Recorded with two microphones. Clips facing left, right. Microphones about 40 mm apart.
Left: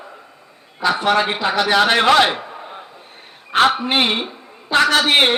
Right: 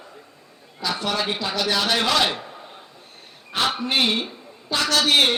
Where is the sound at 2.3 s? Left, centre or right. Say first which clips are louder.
Left 5 dB; left.